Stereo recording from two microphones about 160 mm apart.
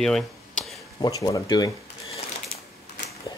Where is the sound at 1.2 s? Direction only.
25° left (ahead or behind).